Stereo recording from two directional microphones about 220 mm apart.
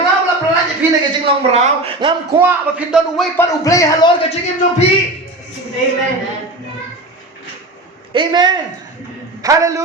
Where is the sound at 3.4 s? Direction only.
15° left (ahead or behind).